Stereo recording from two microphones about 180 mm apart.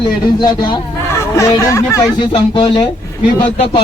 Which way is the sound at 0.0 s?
25° left (ahead or behind).